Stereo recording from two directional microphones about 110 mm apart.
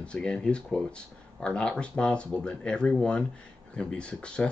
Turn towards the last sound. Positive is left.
turn(degrees=10)  # may be behind; listen again after turning